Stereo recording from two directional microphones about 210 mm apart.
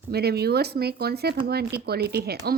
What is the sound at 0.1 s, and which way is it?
Speech, 50° right (ahead or behind).